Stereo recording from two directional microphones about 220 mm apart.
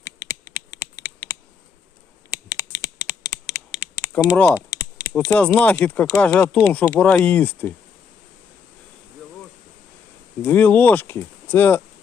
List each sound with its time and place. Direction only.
2.3 s computer keyboard: 15° left (ahead or behind)
4.1 s speech: 5° left (ahead or behind)
10.4 s speech: 10° left (ahead or behind)